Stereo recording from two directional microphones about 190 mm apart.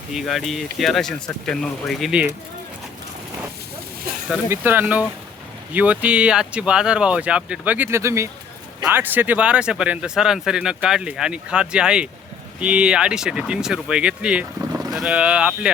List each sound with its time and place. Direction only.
0.1 s speech: centre (ahead or behind)
4.3 s speech: 10° right (ahead or behind)